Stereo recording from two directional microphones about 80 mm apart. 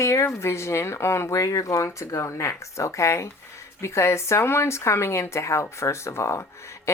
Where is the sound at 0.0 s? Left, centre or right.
Left.